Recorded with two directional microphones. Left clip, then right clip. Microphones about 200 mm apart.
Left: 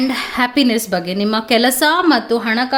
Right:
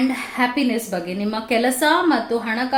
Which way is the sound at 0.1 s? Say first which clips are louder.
Left 4 dB; 45° left (ahead or behind).